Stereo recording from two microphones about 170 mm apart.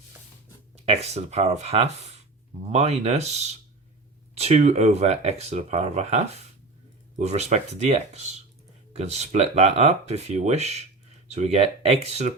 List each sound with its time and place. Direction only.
0.9 s speech: 40° right (ahead or behind)
7.2 s speech: 40° right (ahead or behind)